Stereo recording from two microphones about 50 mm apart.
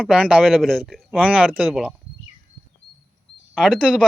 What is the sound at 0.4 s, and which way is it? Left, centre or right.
Speech, centre.